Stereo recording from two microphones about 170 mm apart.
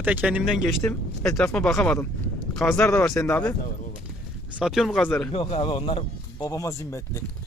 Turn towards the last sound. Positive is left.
turn(degrees=15)  # may be behind; listen again after turning